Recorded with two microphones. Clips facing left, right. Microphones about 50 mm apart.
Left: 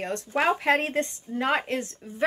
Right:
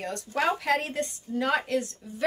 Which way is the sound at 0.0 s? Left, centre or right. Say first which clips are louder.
Left 2 dB; left.